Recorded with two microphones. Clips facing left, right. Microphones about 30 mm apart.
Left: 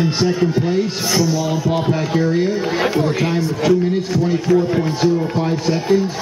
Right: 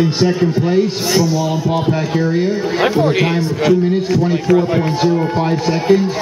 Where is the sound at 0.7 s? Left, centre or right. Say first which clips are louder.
Right 4 dB; centre.